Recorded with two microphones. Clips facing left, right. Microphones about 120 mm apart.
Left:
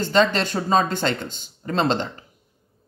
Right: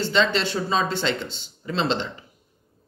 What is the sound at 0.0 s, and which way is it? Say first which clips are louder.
Speech: left 3 dB; 45° left (ahead or behind).